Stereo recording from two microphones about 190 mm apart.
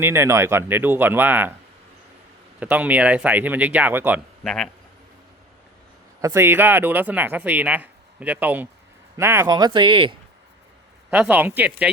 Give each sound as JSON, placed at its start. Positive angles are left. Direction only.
{"t": 0.0, "sound": "speech", "side_deg": -15}
{"t": 2.6, "sound": "speech", "side_deg": -10}
{"t": 4.4, "sound": "speech", "side_deg": 5}
{"t": 6.2, "sound": "speech", "side_deg": -10}
{"t": 11.1, "sound": "speech", "side_deg": -10}